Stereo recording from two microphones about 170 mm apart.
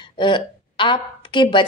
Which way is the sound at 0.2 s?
30° left (ahead or behind).